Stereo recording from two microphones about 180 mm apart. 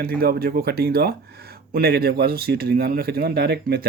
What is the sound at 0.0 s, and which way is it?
Speech, 55° right (ahead or behind).